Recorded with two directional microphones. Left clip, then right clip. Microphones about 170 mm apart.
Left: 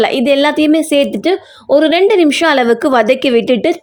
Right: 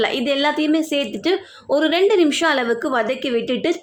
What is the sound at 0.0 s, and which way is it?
Speech, 35° left (ahead or behind).